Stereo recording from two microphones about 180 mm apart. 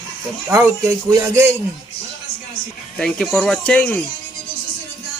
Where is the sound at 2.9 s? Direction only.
5° left (ahead or behind).